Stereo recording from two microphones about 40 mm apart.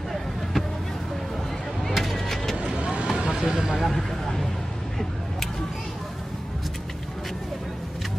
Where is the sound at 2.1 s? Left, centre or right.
Centre.